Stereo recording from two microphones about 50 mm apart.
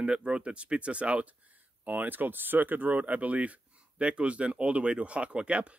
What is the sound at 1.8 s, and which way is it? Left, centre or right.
Speech, right.